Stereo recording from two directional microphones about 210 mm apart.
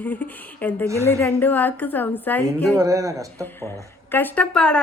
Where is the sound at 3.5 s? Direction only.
10° left (ahead or behind).